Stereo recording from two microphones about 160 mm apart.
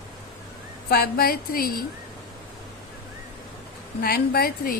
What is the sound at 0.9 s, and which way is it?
Speech, 70° left (ahead or behind).